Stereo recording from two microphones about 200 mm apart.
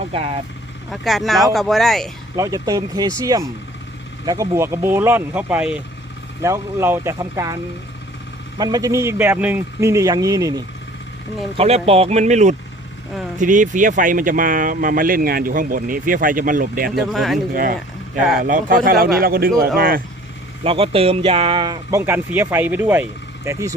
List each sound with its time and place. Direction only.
0.1 s speech: 30° right (ahead or behind)
0.9 s speech: centre (ahead or behind)
2.3 s speech: 15° right (ahead or behind)
8.5 s speech: 20° right (ahead or behind)
11.5 s speech: 30° right (ahead or behind)
16.9 s speech: centre (ahead or behind)
17.5 s speech: 45° right (ahead or behind)
17.7 s speech: centre (ahead or behind)
18.4 s speech: 45° right (ahead or behind)
20.7 s speech: 30° right (ahead or behind)